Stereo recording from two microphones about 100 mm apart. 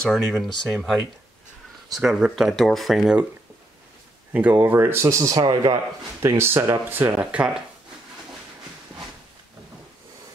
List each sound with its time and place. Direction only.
0.0 s speech: 5° left (ahead or behind)
4.3 s speech: 15° right (ahead or behind); by 5.8 s 35° right (ahead or behind)
6.2 s speech: 25° right (ahead or behind); by 7.6 s 10° right (ahead or behind)